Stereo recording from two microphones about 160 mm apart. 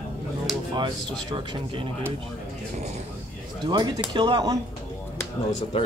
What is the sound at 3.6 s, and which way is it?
Speech, 25° right (ahead or behind).